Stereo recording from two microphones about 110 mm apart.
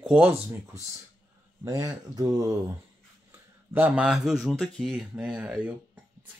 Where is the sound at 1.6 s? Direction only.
35° right (ahead or behind).